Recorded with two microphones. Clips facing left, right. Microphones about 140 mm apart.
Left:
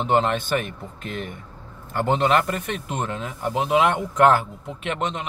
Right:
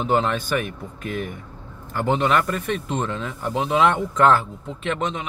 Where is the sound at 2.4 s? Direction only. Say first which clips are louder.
Right 2 dB; 5° left (ahead or behind).